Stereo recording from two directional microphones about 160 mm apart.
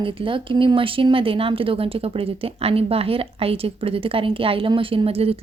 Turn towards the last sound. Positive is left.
turn(degrees=-35)  # may be behind; listen again after turning